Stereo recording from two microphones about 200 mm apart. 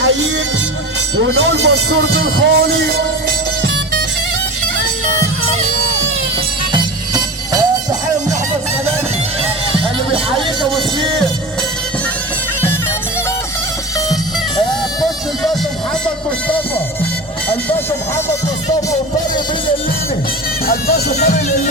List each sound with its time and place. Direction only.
1.1 s speech: 60° right (ahead or behind)
6.7 s music: 20° right (ahead or behind)
20.7 s speech: 50° left (ahead or behind)